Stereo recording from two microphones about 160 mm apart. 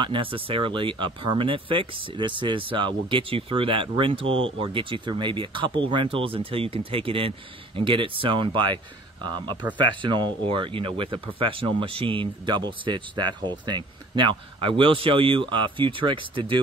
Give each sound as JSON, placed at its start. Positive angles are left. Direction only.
{"t": 0.0, "sound": "speech", "side_deg": -30}